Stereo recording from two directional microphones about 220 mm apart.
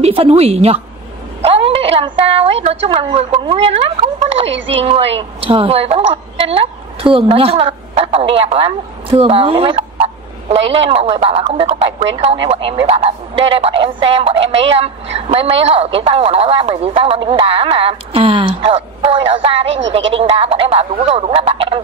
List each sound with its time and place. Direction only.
0.0 s speech: 25° right (ahead or behind)
4.5 s a woman's voice: 55° right (ahead or behind)
4.7 s speech: 25° right (ahead or behind)